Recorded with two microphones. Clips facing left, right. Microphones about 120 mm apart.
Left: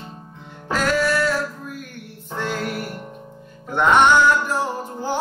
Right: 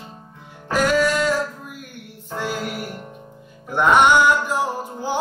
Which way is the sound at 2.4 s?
10° right (ahead or behind).